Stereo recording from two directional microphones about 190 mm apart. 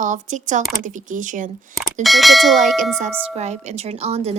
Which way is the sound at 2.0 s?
Centre (ahead or behind).